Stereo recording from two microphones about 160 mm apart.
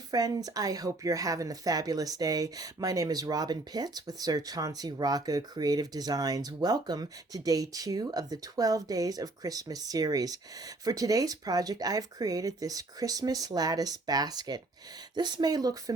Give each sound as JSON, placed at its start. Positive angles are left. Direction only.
{"t": 0.1, "sound": "a woman's voice", "side_deg": -25}